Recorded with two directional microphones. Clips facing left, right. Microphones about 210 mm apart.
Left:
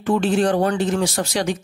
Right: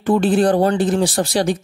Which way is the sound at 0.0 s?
35° right (ahead or behind).